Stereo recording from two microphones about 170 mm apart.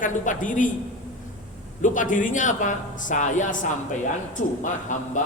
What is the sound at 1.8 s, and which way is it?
Speech, 50° left (ahead or behind).